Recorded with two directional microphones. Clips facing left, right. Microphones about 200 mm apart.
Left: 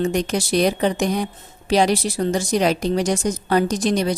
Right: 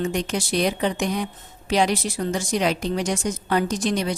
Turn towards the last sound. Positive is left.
turn(degrees=35)  # may be behind; listen again after turning